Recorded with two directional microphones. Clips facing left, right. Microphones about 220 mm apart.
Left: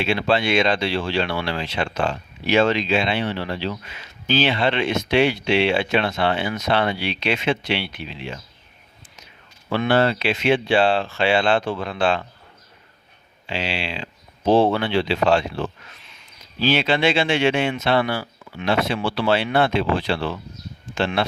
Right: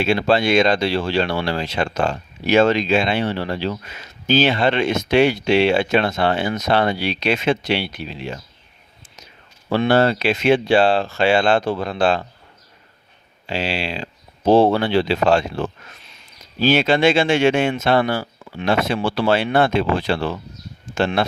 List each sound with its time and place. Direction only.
0.0 s speech: 40° right (ahead or behind)
13.5 s speech: 40° right (ahead or behind)